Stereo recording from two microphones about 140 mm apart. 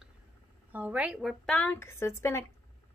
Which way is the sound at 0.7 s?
10° right (ahead or behind).